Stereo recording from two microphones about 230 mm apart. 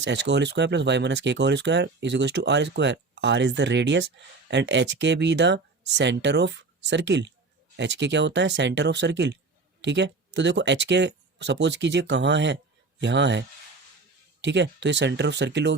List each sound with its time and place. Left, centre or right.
0.0 s speech: right
14.4 s speech: right